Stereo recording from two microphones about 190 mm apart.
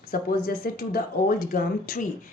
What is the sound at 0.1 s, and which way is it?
Speech, 50° left (ahead or behind).